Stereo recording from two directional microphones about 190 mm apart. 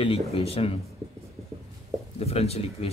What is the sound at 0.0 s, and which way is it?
Speech, 30° left (ahead or behind).